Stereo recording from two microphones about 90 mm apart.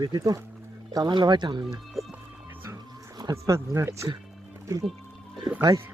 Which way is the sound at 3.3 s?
35° right (ahead or behind).